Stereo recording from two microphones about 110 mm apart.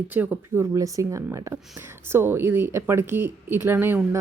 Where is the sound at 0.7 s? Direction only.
30° right (ahead or behind).